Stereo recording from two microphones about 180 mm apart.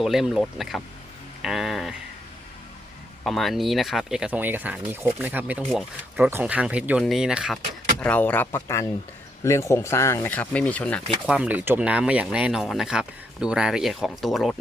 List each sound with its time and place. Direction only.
0.0 s speech: centre (ahead or behind)
3.2 s speech: centre (ahead or behind)
8.0 s speech: 10° left (ahead or behind)
11.3 s speech: 5° right (ahead or behind)